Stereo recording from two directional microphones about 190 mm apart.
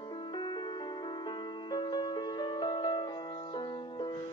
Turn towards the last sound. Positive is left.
turn(degrees=25)  # may be behind; listen again after turning